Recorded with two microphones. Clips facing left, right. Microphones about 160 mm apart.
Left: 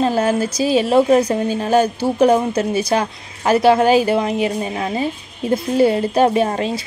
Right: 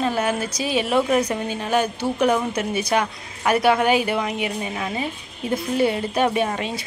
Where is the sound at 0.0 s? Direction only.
35° left (ahead or behind).